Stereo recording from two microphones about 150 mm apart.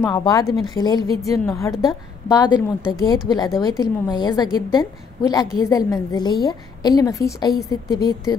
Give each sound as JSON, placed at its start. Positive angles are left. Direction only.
{"t": 0.0, "sound": "a woman's voice", "side_deg": 25}